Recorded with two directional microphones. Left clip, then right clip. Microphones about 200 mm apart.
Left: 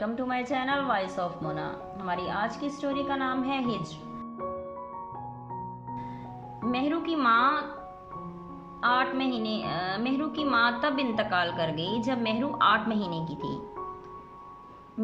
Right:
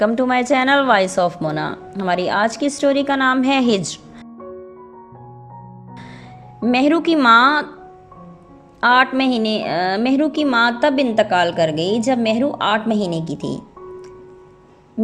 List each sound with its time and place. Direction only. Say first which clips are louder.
0.0 s a woman's voice: right 14 dB; 45° right (ahead or behind)
6.7 s a woman's voice: right 13 dB; 45° right (ahead or behind)
8.8 s a woman's voice: right 12 dB; 45° right (ahead or behind)
15.0 s owl: right 11 dB; 25° right (ahead or behind)